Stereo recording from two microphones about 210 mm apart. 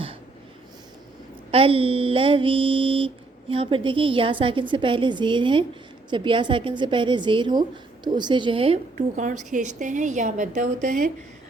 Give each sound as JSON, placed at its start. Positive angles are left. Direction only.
{"t": 1.5, "sound": "a woman's voice", "side_deg": -25}